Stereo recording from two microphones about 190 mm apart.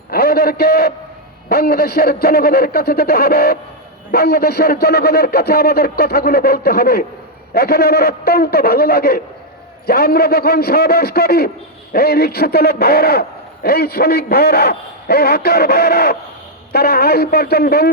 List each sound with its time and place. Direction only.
0.1 s a man's voice: 55° left (ahead or behind)